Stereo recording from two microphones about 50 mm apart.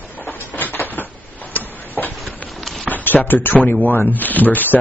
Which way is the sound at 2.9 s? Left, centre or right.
Left.